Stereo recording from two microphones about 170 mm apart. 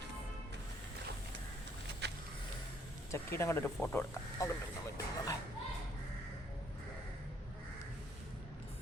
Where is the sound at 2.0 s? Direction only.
80° right.